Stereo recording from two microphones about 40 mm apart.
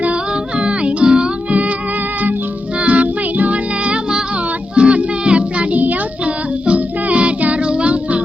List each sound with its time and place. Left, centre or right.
0.6 s music: right
2.8 s music: right
4.7 s music: right